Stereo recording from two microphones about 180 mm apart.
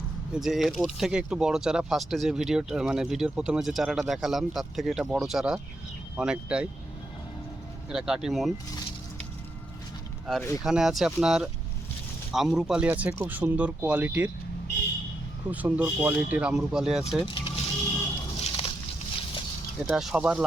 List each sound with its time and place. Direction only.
0.3 s speech: centre (ahead or behind)
7.9 s speech: 5° right (ahead or behind)
10.3 s speech: centre (ahead or behind)
15.4 s speech: 10° right (ahead or behind)
17.2 s vehicle: 30° left (ahead or behind)
18.3 s a sound: 35° left (ahead or behind)
19.9 s speech: 5° right (ahead or behind)